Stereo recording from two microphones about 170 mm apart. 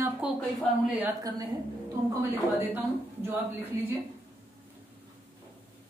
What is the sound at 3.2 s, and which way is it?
Speech, 10° right (ahead or behind).